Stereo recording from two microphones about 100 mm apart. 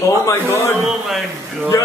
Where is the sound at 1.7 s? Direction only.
30° left (ahead or behind).